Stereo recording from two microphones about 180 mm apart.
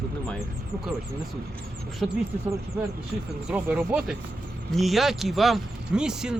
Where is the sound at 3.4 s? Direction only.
10° right (ahead or behind).